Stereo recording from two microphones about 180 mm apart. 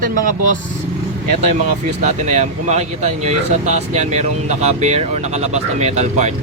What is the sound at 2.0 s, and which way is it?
Speech, 40° right (ahead or behind).